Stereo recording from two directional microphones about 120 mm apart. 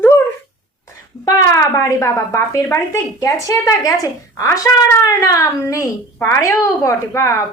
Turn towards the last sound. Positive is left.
turn(degrees=25)  # may be behind; listen again after turning